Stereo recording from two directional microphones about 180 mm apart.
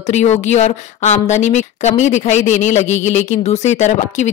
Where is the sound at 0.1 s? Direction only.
40° left (ahead or behind).